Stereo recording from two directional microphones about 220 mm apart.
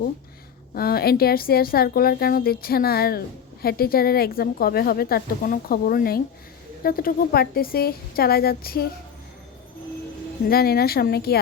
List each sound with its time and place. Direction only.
0.7 s speech: 45° left (ahead or behind)
10.5 s speech: 45° left (ahead or behind)